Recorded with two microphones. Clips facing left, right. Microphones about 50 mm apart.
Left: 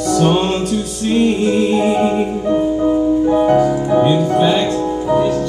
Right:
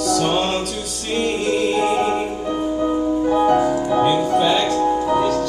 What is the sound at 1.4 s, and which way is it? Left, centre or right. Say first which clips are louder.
Music: left 4 dB; centre.